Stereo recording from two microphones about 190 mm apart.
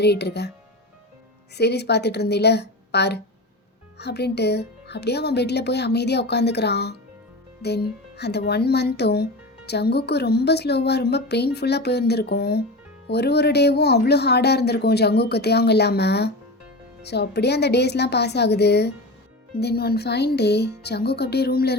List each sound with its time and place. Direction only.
0.0 s speech: 60° left (ahead or behind)
1.5 s speech: 60° left (ahead or behind)